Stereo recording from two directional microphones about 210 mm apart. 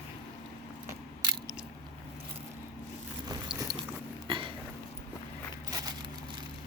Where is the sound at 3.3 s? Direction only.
20° right (ahead or behind).